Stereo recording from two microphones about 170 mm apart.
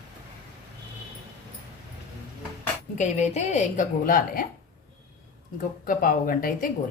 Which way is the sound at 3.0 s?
40° left (ahead or behind).